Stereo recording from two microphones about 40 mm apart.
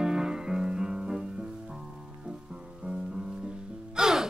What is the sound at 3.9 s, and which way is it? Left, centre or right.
Music, centre.